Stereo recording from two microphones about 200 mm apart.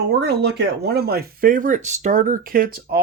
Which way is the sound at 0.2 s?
55° right (ahead or behind).